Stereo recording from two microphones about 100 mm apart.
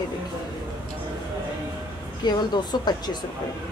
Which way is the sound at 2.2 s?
45° left (ahead or behind).